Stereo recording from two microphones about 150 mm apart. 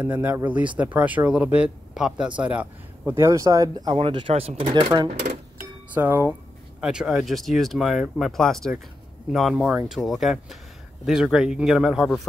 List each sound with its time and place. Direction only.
0.0 s speech: 10° right (ahead or behind); by 5.0 s 35° right (ahead or behind)
5.9 s speech: 15° right (ahead or behind)